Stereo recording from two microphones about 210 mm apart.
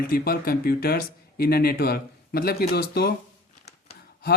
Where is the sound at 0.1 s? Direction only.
45° left (ahead or behind).